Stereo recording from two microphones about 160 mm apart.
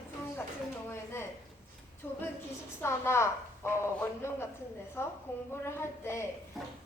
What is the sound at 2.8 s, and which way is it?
A woman's voice, 15° left (ahead or behind).